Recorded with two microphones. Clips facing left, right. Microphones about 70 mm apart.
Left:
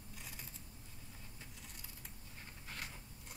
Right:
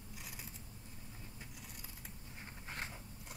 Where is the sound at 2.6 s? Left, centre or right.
Right.